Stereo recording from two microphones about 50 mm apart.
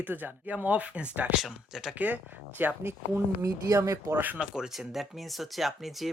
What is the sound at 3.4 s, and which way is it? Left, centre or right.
Speech, right.